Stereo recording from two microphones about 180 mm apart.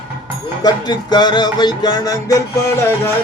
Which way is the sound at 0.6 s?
25° left (ahead or behind).